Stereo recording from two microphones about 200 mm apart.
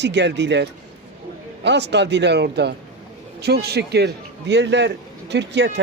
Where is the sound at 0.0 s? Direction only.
60° right (ahead or behind).